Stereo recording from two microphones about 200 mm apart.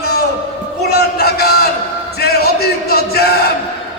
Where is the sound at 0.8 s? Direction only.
50° left (ahead or behind).